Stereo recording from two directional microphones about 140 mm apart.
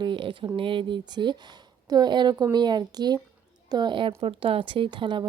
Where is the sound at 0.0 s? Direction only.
35° right (ahead or behind).